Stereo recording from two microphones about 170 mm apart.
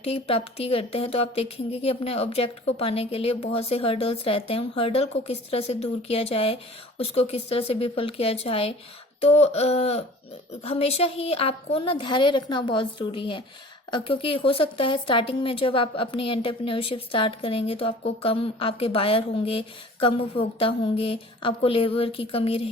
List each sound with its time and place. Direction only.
0.0 s speech: 35° left (ahead or behind)